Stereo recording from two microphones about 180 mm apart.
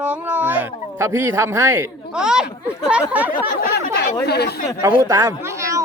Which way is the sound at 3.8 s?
65° left (ahead or behind).